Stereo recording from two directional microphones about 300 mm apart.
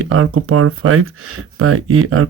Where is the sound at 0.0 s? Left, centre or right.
Right.